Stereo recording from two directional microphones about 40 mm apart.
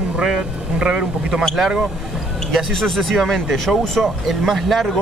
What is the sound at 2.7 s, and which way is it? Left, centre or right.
Speech, centre.